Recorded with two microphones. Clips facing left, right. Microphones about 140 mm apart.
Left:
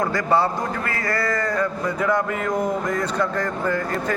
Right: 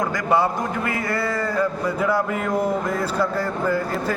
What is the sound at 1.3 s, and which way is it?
A man's voice, 5° right (ahead or behind).